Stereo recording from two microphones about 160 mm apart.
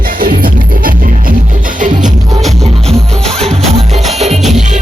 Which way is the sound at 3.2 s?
5° left (ahead or behind).